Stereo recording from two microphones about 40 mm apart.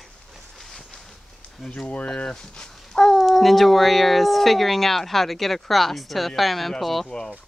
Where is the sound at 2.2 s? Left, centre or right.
Left.